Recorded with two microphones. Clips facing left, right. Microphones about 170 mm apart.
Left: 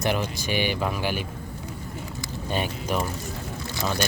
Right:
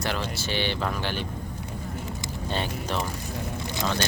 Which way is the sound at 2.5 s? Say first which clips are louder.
Left 3 dB; 15° left (ahead or behind).